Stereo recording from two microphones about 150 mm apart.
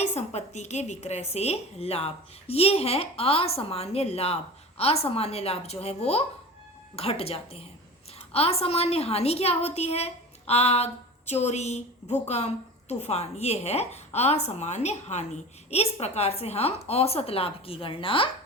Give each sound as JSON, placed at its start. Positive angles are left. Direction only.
{"t": 0.0, "sound": "a woman's voice", "side_deg": 50}